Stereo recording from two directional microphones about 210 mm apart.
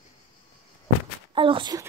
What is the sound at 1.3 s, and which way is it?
Speech, 25° right (ahead or behind).